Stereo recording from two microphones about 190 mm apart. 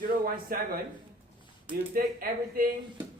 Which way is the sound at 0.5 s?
50° right (ahead or behind).